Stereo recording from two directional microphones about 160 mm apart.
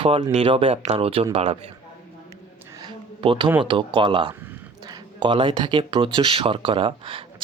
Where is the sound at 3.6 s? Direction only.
30° right (ahead or behind).